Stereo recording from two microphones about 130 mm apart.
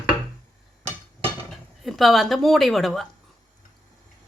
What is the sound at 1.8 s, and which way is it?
A woman's voice, centre (ahead or behind).